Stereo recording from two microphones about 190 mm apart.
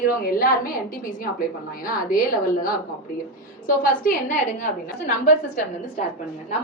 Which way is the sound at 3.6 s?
50° left (ahead or behind).